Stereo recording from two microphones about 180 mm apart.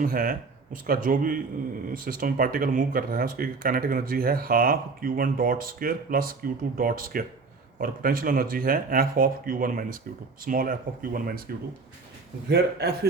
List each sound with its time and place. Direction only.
0.0 s speech: 50° right (ahead or behind)
12.5 s a man's voice: 65° right (ahead or behind)